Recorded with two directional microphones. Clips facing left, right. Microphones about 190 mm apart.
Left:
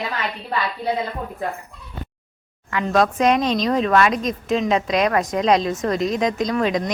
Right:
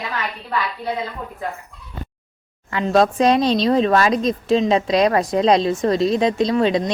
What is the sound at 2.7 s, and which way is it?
Speech, 30° right (ahead or behind).